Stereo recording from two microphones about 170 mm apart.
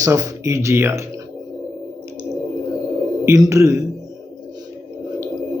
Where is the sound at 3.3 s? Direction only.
15° right (ahead or behind).